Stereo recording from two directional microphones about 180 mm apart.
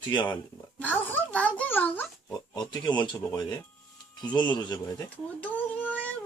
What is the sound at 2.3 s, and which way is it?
Speech, 20° left (ahead or behind).